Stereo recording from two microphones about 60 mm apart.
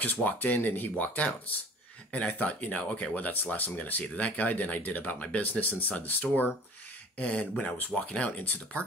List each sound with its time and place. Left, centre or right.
0.0 s speech: left